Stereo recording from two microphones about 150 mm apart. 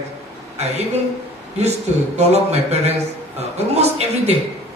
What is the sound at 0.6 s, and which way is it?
A man's voice, 45° right (ahead or behind).